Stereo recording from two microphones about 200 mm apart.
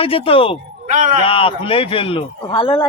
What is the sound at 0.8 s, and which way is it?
Speech, 40° right (ahead or behind).